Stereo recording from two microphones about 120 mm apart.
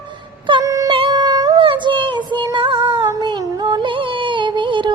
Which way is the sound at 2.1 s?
40° right (ahead or behind).